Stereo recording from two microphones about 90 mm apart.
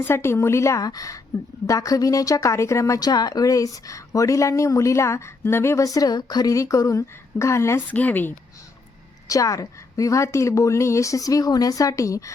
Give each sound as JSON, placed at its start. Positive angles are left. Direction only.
{"t": 0.0, "sound": "a woman's voice", "side_deg": 30}
{"t": 7.9, "sound": "speech", "side_deg": 15}
{"t": 9.2, "sound": "speech", "side_deg": 40}